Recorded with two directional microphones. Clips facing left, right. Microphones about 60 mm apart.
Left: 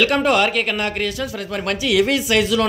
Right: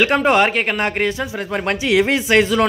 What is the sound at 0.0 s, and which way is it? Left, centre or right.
Speech, right.